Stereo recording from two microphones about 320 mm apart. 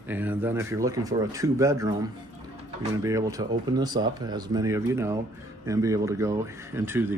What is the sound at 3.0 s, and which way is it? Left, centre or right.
Speech, centre.